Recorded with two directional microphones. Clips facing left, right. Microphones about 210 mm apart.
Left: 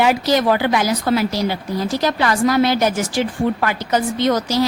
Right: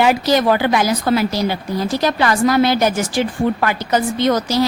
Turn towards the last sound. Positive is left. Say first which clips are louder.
# right 1 dB
turn(degrees=-60)  # may be behind; listen again after turning